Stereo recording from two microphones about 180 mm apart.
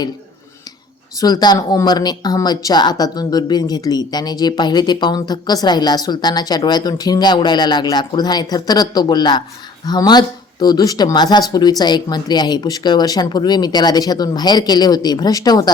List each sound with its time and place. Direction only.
1.2 s speech: 20° left (ahead or behind)